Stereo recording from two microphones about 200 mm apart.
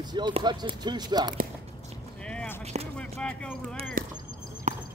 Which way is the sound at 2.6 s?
35° right (ahead or behind).